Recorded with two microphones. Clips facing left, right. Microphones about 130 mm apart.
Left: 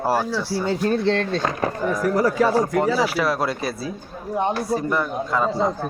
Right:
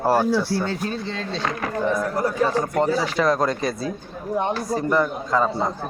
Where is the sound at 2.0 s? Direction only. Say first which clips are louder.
Left 3 dB; 90° left.